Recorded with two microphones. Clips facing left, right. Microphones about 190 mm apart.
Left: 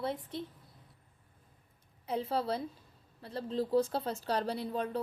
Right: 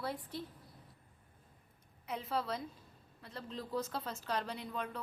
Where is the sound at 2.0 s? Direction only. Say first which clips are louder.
Left 5 dB; 30° left (ahead or behind).